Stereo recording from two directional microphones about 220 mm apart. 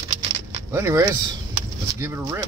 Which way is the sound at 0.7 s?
10° right (ahead or behind).